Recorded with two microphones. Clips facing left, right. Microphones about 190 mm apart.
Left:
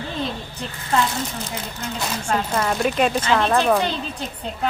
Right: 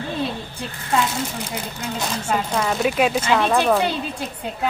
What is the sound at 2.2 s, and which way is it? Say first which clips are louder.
Speech: even; centre (ahead or behind).